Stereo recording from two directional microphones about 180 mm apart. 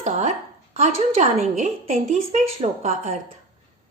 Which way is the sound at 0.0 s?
40° right (ahead or behind).